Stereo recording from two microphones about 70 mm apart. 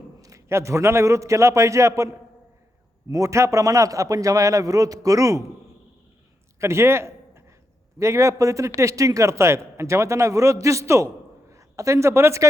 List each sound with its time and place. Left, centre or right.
0.2 s a man's voice: right
3.1 s a man's voice: right
6.6 s a man's voice: right